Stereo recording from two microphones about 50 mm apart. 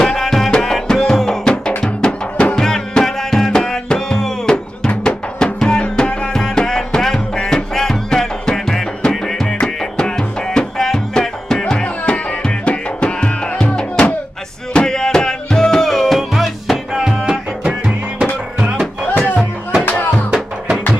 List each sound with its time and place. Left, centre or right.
0.0 s music: centre
19.8 s music: left